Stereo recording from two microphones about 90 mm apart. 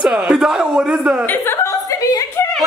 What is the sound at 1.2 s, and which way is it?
Chuckle, 25° left (ahead or behind).